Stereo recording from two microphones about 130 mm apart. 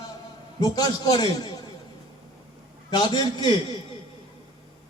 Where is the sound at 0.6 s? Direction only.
30° left (ahead or behind).